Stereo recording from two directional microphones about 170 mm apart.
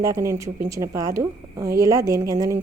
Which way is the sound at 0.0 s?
15° right (ahead or behind).